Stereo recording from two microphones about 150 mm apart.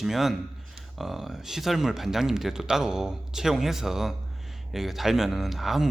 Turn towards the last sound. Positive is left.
turn(degrees=0)  # may be behind; listen again after turning